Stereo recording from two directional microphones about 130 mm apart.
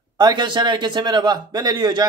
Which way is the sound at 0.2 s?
35° right (ahead or behind).